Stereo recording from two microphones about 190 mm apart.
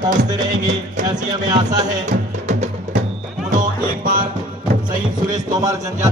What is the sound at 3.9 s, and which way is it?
Speech, 50° right (ahead or behind).